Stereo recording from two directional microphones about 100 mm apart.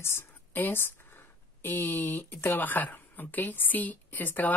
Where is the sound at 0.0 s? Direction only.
20° left (ahead or behind).